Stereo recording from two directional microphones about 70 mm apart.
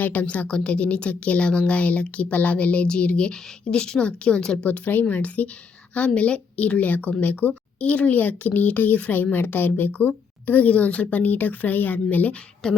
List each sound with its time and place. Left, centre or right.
0.0 s a woman's voice: left
12.6 s a woman's voice: centre